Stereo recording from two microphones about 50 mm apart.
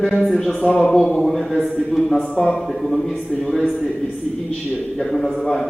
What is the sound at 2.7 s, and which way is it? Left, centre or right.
Speech, centre.